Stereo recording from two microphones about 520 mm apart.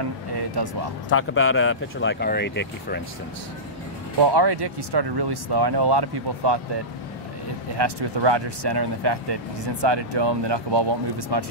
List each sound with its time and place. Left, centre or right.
0.6 s speech: right
1.1 s speech: left
4.2 s speech: right
7.7 s speech: right